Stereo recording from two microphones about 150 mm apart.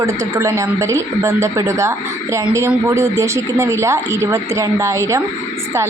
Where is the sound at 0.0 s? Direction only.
20° right (ahead or behind).